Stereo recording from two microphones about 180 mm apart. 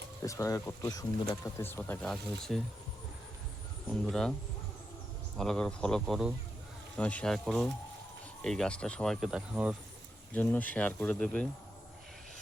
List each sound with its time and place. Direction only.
0.2 s speech: 15° left (ahead or behind); by 2.6 s centre (ahead or behind)
4.0 s speech: 5° left (ahead or behind)
5.4 s speech: 5° left (ahead or behind)
10.3 s speech: 10° left (ahead or behind)